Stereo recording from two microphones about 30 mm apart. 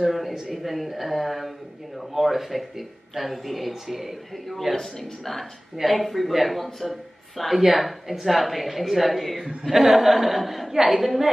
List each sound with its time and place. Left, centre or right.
0.0 s a sound: centre
0.3 s a man's voice: centre
4.5 s a man's voice: centre
10.7 s a woman's voice: centre
11.0 s a man's voice: centre